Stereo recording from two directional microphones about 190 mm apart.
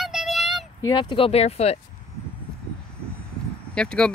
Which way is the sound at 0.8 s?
25° left (ahead or behind).